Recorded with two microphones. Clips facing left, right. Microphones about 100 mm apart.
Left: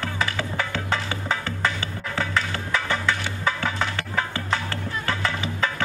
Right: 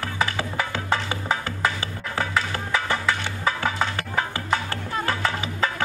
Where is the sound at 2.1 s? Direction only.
15° right (ahead or behind).